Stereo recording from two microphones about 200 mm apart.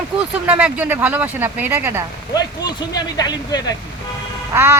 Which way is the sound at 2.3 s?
20° left (ahead or behind).